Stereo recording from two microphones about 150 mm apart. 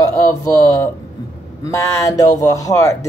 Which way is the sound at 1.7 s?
20° left (ahead or behind).